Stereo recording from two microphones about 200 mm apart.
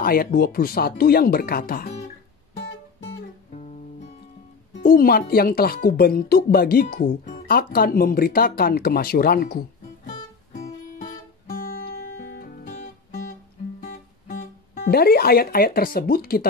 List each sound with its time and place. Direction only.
0.0 s speech: 45° left (ahead or behind)
2.6 s music: 70° left (ahead or behind)
4.8 s speech: 45° left (ahead or behind)
11.5 s music: 45° left (ahead or behind)